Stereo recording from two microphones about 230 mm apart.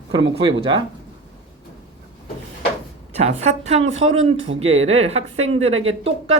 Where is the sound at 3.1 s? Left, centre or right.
Right.